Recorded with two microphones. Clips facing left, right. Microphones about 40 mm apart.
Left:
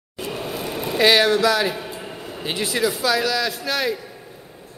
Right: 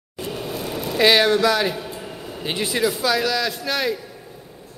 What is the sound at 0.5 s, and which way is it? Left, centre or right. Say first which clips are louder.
Vehicle: even; centre.